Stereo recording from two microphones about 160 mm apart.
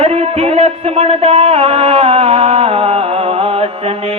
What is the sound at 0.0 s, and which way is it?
Music, 40° right (ahead or behind).